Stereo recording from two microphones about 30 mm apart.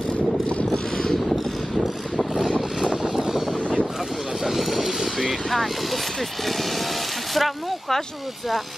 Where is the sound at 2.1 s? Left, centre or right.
Centre.